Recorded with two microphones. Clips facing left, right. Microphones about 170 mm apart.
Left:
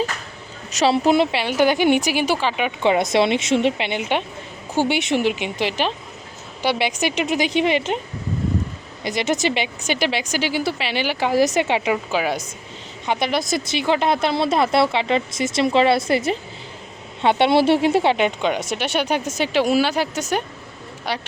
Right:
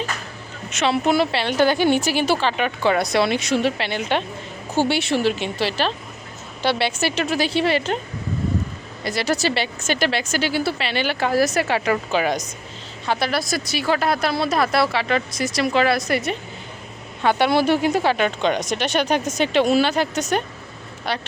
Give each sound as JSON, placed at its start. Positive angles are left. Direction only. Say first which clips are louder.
{"t": 0.7, "sound": "speech", "louder": "left 3 dB", "side_deg": 35}
{"t": 2.8, "sound": "speech", "louder": "left 2 dB", "side_deg": 20}
{"t": 9.0, "sound": "speech", "louder": "left 1 dB", "side_deg": 20}
{"t": 12.1, "sound": "speech", "louder": "right 3 dB", "side_deg": 5}
{"t": 13.1, "sound": "speech", "louder": "left 1 dB", "side_deg": 15}
{"t": 18.7, "sound": "speech", "louder": "right 1 dB", "side_deg": 10}